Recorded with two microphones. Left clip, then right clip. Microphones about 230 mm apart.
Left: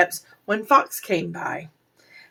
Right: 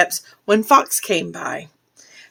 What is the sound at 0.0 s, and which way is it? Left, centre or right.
Speech, right.